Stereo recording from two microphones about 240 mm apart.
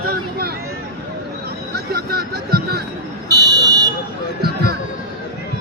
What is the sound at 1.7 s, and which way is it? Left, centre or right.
Speech, right.